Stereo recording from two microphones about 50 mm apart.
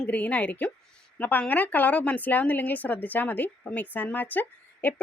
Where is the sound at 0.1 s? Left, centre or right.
Left.